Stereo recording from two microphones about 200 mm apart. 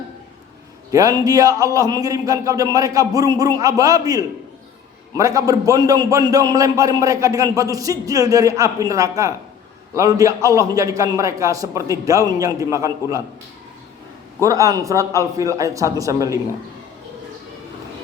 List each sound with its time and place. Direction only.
0.9 s a man's voice: 15° right (ahead or behind)
14.4 s a man's voice: 15° right (ahead or behind)